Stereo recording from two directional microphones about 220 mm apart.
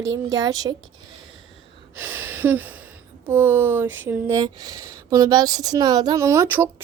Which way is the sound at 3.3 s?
10° right (ahead or behind).